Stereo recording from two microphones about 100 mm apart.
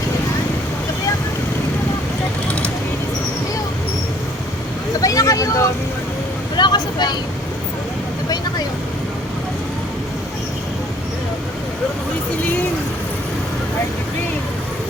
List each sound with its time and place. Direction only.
4.9 s vehicle: 35° left (ahead or behind)
6.6 s vehicle: 45° left (ahead or behind)